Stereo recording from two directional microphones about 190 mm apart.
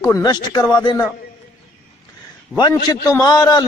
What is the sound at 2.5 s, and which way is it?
A man's voice, 20° left (ahead or behind).